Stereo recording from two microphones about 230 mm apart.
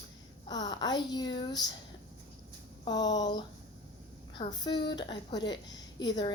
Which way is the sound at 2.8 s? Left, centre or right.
Centre.